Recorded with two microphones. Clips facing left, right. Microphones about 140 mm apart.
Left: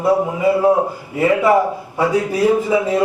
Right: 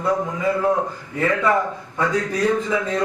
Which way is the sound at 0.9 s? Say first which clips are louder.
Left 6 dB; 15° left (ahead or behind).